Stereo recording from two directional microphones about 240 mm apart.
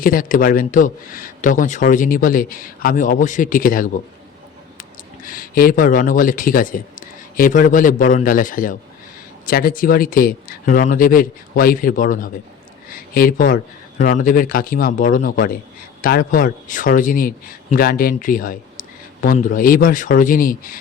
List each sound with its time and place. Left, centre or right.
0.0 s a man's voice: left